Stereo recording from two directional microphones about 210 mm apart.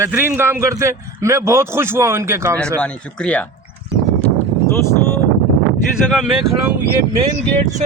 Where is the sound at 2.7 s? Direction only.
5° left (ahead or behind).